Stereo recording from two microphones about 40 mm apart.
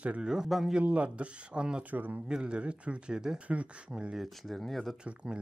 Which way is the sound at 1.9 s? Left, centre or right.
Right.